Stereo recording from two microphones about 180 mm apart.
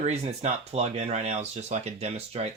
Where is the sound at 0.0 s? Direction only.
35° right (ahead or behind).